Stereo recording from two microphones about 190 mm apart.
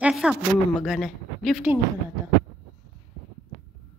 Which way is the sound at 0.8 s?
Centre (ahead or behind).